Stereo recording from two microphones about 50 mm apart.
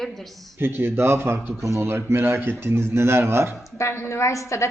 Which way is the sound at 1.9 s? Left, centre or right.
Right.